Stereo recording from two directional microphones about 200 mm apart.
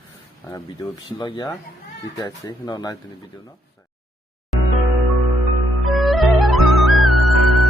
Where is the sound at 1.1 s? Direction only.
20° left (ahead or behind).